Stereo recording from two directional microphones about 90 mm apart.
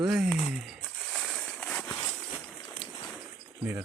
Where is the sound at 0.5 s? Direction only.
5° right (ahead or behind).